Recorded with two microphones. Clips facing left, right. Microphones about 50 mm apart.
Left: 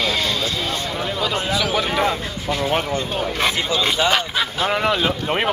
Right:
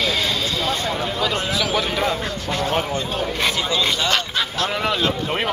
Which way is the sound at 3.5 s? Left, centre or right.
Left.